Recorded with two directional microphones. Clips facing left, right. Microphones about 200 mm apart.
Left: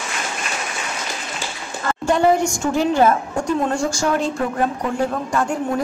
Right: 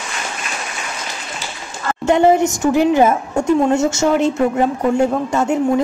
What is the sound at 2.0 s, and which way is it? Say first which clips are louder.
A woman's voice: right 4 dB; 20° right (ahead or behind).